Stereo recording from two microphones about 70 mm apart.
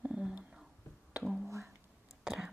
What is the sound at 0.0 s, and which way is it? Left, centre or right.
Whispering, centre.